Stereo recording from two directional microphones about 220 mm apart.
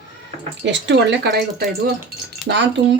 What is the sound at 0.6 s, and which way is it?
Speech, 55° right (ahead or behind).